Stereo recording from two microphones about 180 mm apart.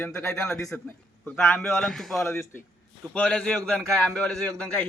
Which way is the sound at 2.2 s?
15° left (ahead or behind).